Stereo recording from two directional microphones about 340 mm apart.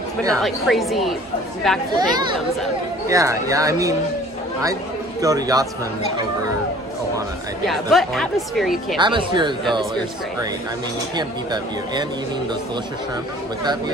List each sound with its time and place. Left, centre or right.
0.2 s speech: centre
2.0 s speech: centre
5.2 s speech: centre
7.6 s speech: centre
8.9 s speech: centre
11.1 s speech: centre